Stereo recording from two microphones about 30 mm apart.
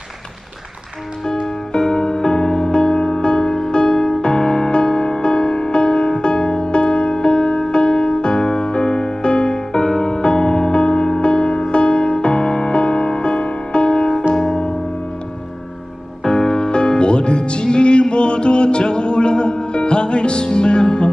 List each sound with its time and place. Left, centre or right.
1.7 s music: left
16.3 s music: left